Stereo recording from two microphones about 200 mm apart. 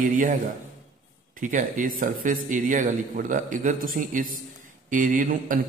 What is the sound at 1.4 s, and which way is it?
A man's voice, 40° right (ahead or behind).